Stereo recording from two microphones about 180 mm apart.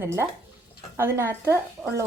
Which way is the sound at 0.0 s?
15° right (ahead or behind).